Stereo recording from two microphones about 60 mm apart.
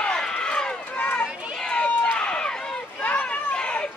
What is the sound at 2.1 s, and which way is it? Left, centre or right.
Run, centre.